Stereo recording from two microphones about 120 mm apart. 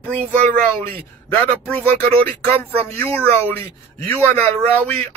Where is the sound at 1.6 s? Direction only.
15° left (ahead or behind).